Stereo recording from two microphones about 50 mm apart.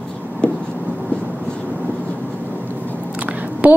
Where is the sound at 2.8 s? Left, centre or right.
Left.